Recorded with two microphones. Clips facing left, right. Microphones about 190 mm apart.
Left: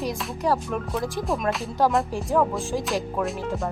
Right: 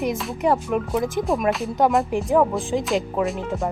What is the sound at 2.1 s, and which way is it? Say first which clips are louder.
Speech: right 4 dB; 20° right (ahead or behind).